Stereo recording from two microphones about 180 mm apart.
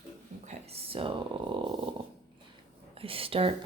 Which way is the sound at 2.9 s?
30° right (ahead or behind).